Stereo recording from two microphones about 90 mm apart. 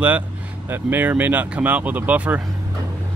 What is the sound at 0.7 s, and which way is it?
Speech, 25° right (ahead or behind).